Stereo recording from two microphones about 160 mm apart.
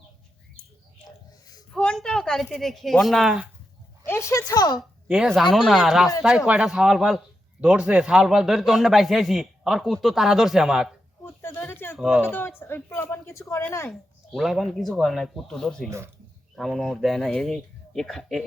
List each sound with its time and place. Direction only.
1.7 s a man's voice: 5° left (ahead or behind)
4.0 s a woman's voice: 15° left (ahead or behind)
4.8 s a man's voice: 5° right (ahead or behind)
11.4 s a sound: 15° left (ahead or behind)
11.9 s speech: 5° right (ahead or behind)
12.3 s speech: 15° left (ahead or behind)
13.9 s a man's voice: centre (ahead or behind)